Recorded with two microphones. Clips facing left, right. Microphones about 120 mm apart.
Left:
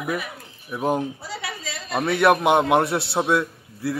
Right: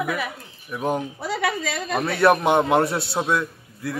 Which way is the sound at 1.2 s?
60° right (ahead or behind).